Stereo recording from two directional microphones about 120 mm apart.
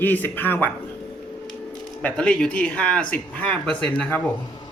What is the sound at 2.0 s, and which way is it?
A man's voice, 10° left (ahead or behind).